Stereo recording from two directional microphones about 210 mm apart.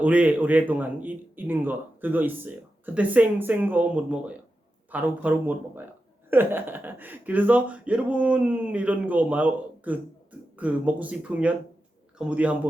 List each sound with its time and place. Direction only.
0.0 s a man's voice: 5° right (ahead or behind)